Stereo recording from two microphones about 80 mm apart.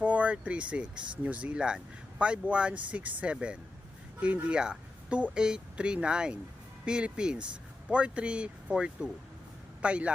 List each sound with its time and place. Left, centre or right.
0.0 s speech: centre